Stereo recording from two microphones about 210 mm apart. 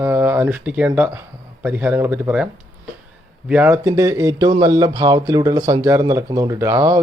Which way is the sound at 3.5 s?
10° right (ahead or behind).